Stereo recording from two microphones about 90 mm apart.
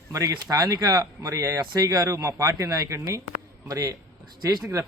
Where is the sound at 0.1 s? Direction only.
45° right (ahead or behind).